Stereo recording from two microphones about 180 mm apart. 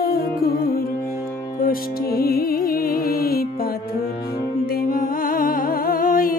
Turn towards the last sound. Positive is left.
turn(degrees=50)  # may be behind; listen again after turning